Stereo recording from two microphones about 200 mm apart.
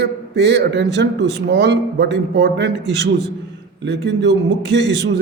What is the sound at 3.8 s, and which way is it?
Speech, 60° right (ahead or behind).